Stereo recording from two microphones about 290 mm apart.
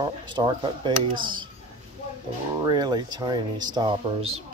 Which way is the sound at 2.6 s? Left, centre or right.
Centre.